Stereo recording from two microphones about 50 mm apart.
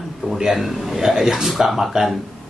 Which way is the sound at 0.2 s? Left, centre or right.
Centre.